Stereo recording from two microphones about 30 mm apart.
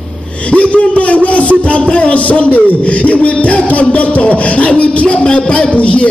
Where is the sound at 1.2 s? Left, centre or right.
Left.